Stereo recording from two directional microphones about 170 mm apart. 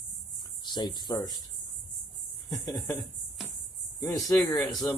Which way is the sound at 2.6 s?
20° left (ahead or behind).